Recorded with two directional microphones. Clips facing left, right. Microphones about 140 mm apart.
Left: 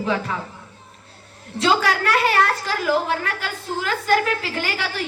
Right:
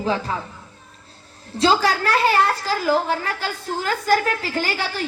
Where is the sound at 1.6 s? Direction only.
30° right (ahead or behind).